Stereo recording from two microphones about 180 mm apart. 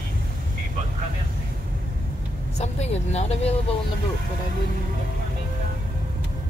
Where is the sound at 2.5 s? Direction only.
40° left (ahead or behind).